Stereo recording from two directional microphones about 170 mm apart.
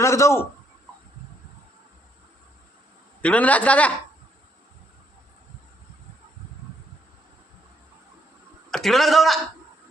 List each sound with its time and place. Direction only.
0.0 s a woman's voice: 15° left (ahead or behind)
3.2 s a woman's voice: 10° left (ahead or behind)
8.7 s a man's voice: centre (ahead or behind)